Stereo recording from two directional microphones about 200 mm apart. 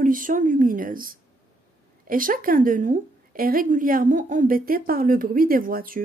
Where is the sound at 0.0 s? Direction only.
40° right (ahead or behind).